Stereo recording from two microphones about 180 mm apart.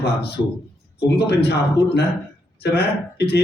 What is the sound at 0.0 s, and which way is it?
A man's voice, 65° left (ahead or behind).